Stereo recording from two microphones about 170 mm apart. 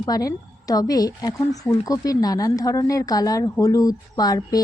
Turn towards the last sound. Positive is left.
turn(degrees=20)  # may be behind; listen again after turning